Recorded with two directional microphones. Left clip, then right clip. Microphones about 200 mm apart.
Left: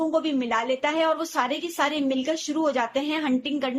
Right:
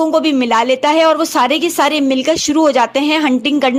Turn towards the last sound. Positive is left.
turn(degrees=-50)  # may be behind; listen again after turning